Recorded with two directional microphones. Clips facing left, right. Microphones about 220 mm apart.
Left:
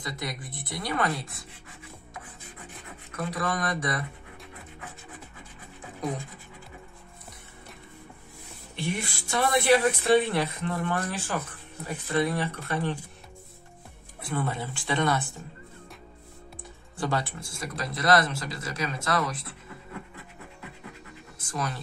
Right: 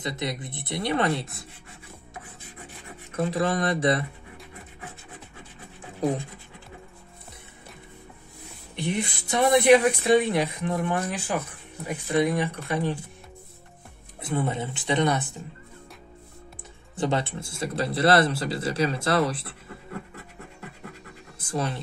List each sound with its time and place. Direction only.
0.0 s speech: 25° right (ahead or behind)
3.2 s speech: 25° right (ahead or behind)
8.7 s speech: 20° right (ahead or behind)
14.2 s speech: 20° right (ahead or behind)
17.0 s speech: 25° right (ahead or behind)
21.5 s speech: 30° right (ahead or behind)